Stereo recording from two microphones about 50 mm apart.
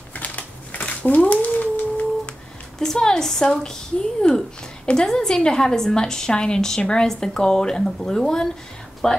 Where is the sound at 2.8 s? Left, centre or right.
Centre.